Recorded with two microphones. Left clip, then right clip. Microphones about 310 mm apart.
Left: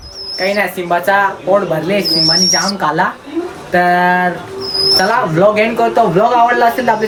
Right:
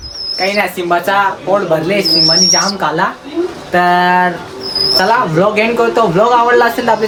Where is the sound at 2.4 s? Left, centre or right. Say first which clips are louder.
Right 2 dB; centre.